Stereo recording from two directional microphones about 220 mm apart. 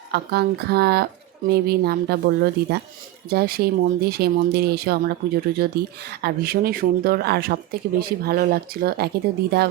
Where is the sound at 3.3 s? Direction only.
45° right (ahead or behind).